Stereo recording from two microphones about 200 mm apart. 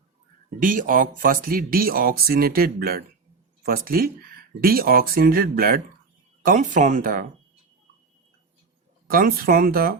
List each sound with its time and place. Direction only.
0.6 s speech: 40° right (ahead or behind)
9.0 s speech: 45° right (ahead or behind)